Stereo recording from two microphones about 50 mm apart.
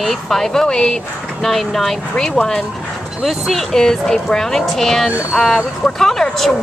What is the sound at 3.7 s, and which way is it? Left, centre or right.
Speech, centre.